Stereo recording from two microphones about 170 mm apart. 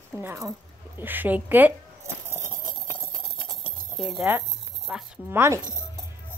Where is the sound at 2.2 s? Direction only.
25° right (ahead or behind).